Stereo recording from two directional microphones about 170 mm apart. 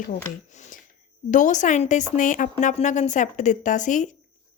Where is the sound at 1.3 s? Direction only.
45° left (ahead or behind).